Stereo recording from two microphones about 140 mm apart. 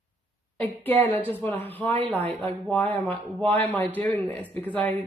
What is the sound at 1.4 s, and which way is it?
Speech, 15° left (ahead or behind).